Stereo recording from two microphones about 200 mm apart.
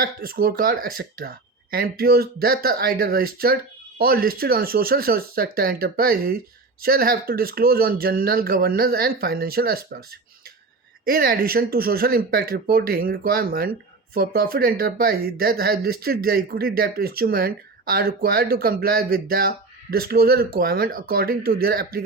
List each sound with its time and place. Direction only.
0.0 s speech: 50° right (ahead or behind)